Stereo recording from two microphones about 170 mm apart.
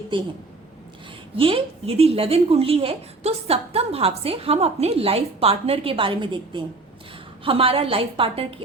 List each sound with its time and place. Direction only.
0.1 s a woman's voice: 30° right (ahead or behind)
1.4 s a woman's voice: 30° right (ahead or behind)